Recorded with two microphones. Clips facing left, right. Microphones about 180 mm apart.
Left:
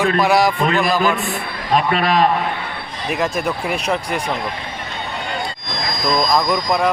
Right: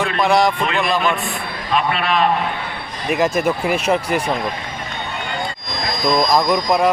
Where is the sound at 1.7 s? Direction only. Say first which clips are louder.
Left 2 dB; 40° left (ahead or behind).